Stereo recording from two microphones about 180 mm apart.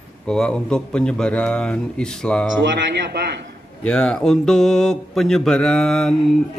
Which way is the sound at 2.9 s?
70° right (ahead or behind).